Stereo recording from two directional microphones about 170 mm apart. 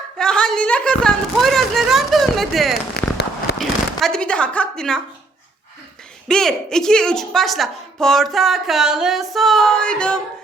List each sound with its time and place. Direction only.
0.2 s a woman's voice: 5° left (ahead or behind)
3.0 s a sound: 70° left (ahead or behind)
3.6 s speech: 5° left (ahead or behind)
6.2 s a woman's voice: 5° left (ahead or behind)